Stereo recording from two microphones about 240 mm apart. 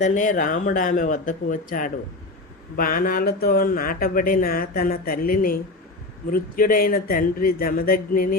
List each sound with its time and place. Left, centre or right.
0.0 s speech: left